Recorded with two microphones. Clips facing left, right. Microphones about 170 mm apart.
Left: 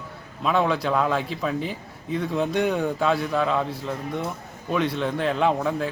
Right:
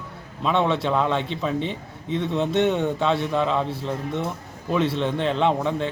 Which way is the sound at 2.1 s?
Centre (ahead or behind).